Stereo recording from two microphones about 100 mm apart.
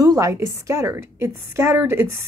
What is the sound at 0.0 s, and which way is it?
Speech, 35° right (ahead or behind).